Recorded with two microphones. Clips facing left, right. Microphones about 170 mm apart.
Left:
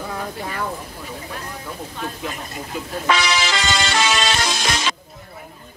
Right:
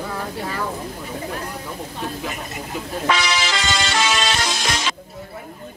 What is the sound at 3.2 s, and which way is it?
Music, 90° left.